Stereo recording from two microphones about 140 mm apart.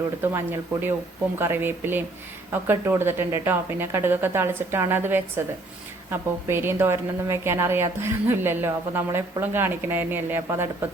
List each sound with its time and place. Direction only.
0.2 s a woman's voice: 15° right (ahead or behind)